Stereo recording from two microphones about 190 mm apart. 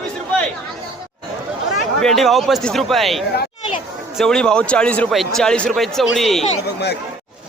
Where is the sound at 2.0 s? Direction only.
Centre (ahead or behind).